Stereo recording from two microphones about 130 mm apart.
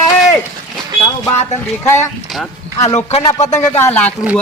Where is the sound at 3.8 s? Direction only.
15° left (ahead or behind).